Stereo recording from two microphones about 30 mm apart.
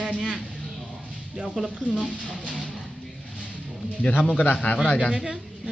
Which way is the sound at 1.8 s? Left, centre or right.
Right.